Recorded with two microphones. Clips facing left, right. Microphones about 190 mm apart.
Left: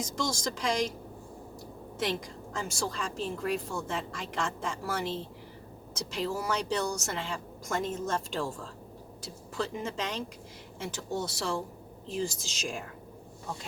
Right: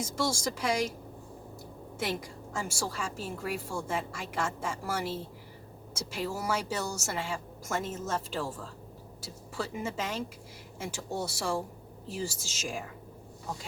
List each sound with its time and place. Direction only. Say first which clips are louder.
0.0 s a woman's voice: right 1 dB; 10° right (ahead or behind)
2.0 s a woman's voice: left 2 dB; 10° right (ahead or behind)